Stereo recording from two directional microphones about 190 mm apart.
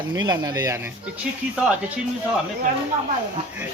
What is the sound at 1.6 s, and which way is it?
Speech, 5° right (ahead or behind).